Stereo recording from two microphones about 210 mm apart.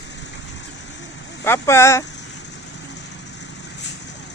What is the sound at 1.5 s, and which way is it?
Speech, 10° left (ahead or behind).